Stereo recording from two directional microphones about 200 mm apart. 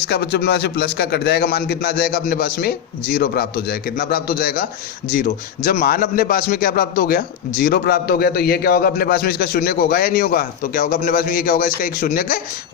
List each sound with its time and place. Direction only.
0.1 s a man's voice: 55° left (ahead or behind)